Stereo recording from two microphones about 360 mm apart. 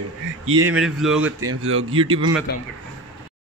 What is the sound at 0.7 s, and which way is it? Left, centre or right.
Speech, centre.